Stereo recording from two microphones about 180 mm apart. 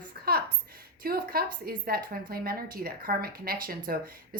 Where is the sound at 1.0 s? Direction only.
55° right (ahead or behind).